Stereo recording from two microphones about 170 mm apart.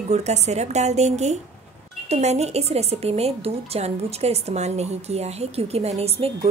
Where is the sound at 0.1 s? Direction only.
40° right (ahead or behind).